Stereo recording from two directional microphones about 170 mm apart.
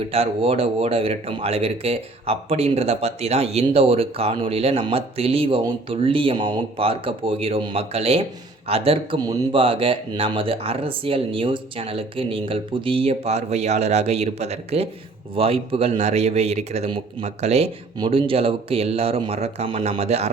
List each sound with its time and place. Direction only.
0.1 s speech: 35° right (ahead or behind)
17.9 s speech: 30° right (ahead or behind)